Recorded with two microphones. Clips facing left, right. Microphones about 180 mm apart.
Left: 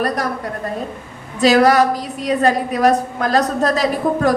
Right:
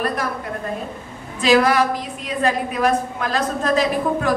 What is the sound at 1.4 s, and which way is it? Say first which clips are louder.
A woman's voice: left 4 dB; 40° left (ahead or behind).